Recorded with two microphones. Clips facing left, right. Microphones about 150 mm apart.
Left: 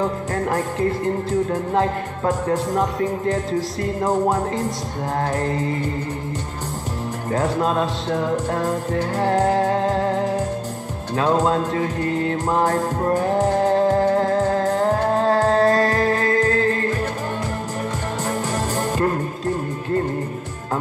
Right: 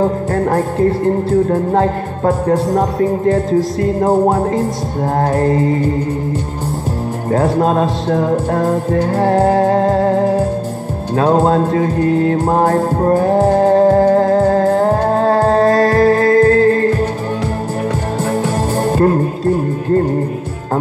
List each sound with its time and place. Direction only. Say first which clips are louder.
0.0 s music: right 7 dB; 45° right (ahead or behind)
7.2 s music: right 7 dB; 40° right (ahead or behind)
18.8 s music: right 9 dB; 40° right (ahead or behind)